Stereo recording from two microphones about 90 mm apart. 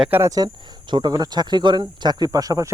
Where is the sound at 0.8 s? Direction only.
55° right (ahead or behind).